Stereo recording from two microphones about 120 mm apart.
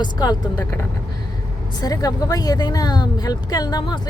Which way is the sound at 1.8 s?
30° left (ahead or behind).